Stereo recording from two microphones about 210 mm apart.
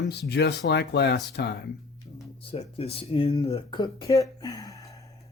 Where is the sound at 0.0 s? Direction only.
50° left (ahead or behind).